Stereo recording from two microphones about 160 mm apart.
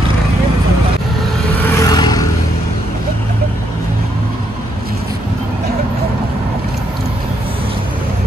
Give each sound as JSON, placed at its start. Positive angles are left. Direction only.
{"t": 1.8, "sound": "vehicle", "side_deg": 25}